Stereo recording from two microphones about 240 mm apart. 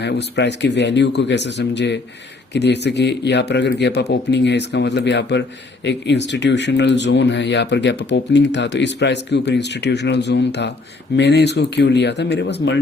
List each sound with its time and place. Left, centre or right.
0.0 s speech: left